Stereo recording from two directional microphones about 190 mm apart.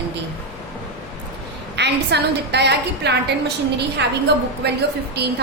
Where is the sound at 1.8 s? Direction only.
60° right (ahead or behind).